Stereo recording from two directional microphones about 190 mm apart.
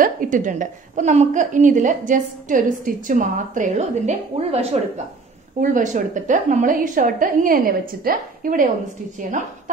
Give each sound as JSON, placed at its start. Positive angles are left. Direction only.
{"t": 0.0, "sound": "a woman's voice", "side_deg": -45}
{"t": 5.6, "sound": "a woman's voice", "side_deg": -40}